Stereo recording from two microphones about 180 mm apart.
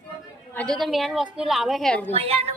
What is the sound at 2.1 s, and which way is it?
Speech, 35° right (ahead or behind).